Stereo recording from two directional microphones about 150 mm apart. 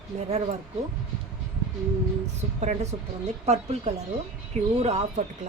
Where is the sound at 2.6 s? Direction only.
45° right (ahead or behind).